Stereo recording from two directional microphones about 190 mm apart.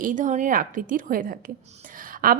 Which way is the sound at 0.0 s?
45° right (ahead or behind).